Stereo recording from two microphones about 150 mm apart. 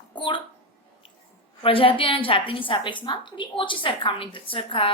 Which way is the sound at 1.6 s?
40° left (ahead or behind).